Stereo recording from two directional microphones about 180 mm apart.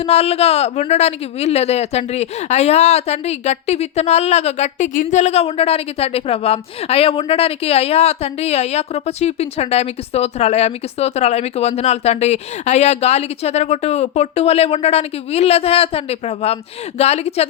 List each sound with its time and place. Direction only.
0.0 s a woman's voice: 35° left (ahead or behind)